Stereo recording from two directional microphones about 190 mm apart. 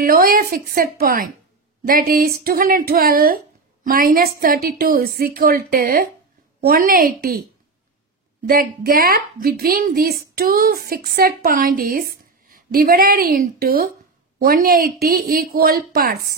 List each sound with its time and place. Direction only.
0.0 s a woman's voice: 50° right (ahead or behind)
8.5 s a woman's voice: 50° right (ahead or behind)